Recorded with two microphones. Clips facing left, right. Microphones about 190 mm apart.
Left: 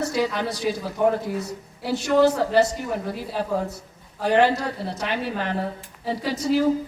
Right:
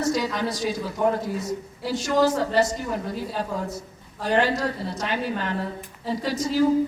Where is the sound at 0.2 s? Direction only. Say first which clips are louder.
Left 2 dB; 60° left (ahead or behind).